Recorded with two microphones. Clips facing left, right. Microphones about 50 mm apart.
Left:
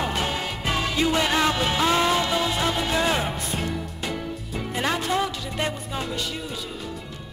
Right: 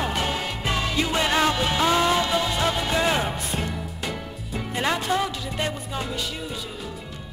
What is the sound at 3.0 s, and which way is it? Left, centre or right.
Music, centre.